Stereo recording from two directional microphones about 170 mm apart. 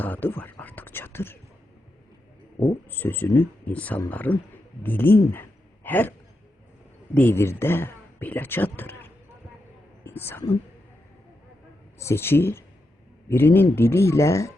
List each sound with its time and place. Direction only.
0.0 s whispering: 10° left (ahead or behind)
2.9 s speech: 10° left (ahead or behind)
11.9 s speech: 15° left (ahead or behind)